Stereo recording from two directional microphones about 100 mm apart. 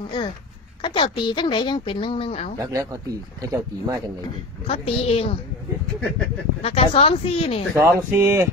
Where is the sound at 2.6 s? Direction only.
35° right (ahead or behind).